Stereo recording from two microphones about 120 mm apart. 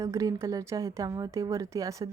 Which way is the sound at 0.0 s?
30° right (ahead or behind).